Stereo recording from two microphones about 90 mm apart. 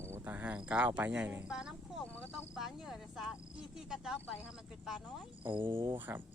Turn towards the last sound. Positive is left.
turn(degrees=-65)  # may be behind; listen again after turning